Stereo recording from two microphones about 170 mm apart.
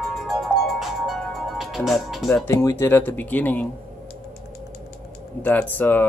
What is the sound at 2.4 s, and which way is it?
Speech, 15° left (ahead or behind).